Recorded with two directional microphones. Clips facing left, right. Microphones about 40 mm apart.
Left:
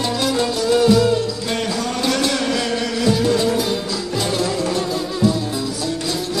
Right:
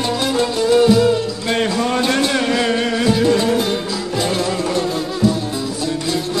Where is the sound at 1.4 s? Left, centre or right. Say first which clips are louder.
Right 4 dB; right.